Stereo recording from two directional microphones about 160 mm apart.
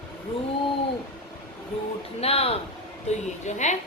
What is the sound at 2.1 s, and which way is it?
A woman's voice, 40° left (ahead or behind).